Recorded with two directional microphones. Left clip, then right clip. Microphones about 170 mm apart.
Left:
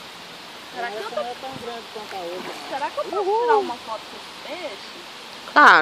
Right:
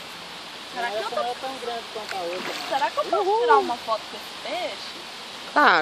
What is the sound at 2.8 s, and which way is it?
Speech, 40° right (ahead or behind).